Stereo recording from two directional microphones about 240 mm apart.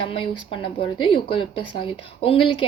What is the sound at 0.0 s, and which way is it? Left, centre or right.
Speech, left.